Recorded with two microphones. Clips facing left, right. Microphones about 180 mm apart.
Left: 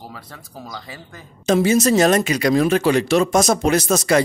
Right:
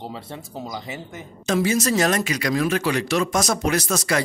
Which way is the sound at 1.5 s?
25° left (ahead or behind).